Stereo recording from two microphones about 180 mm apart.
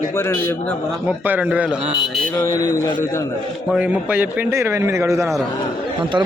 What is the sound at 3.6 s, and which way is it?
A man's voice, 5° right (ahead or behind).